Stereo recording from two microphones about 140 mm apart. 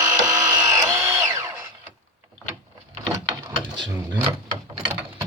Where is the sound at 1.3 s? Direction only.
15° right (ahead or behind).